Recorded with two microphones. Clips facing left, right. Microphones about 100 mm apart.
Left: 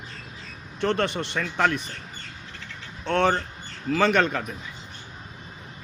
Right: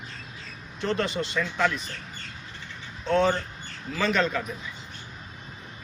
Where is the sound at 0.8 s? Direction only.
60° left (ahead or behind).